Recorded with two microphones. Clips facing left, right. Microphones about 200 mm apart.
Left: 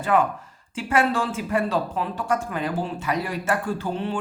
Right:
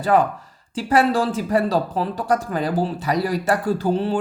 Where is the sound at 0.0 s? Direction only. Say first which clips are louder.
Right 3 dB; 35° right (ahead or behind).